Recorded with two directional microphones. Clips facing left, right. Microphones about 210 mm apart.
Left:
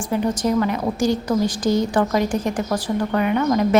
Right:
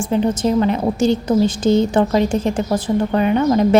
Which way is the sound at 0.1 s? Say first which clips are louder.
Right 3 dB; 25° right (ahead or behind).